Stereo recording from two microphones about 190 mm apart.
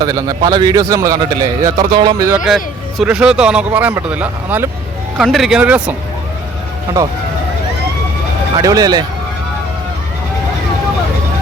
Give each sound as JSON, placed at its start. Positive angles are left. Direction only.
{"t": 0.0, "sound": "a man's voice", "side_deg": -20}
{"t": 2.3, "sound": "speech", "side_deg": 0}
{"t": 8.5, "sound": "a man's voice", "side_deg": -20}